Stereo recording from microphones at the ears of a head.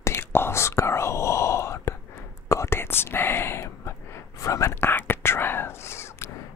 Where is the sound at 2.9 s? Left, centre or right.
Left.